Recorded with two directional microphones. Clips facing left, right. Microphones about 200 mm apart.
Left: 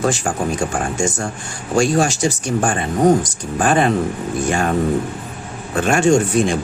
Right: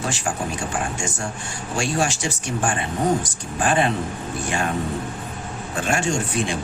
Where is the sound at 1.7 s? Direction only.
40° left (ahead or behind).